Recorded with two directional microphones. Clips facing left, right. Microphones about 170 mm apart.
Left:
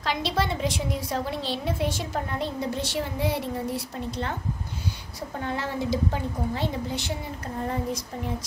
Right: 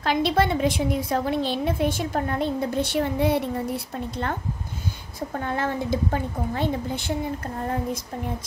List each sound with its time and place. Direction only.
0.0 s a woman's voice: 55° right (ahead or behind)
5.4 s a woman's voice: 50° right (ahead or behind)